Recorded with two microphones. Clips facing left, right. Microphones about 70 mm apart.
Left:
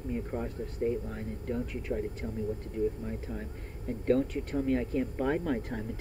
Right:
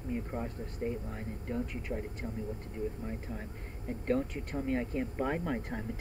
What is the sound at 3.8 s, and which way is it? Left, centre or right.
Speech, right.